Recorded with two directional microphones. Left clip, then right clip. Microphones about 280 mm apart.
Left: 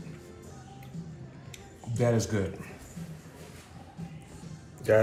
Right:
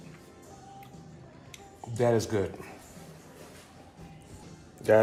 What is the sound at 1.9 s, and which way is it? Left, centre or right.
Speech, centre.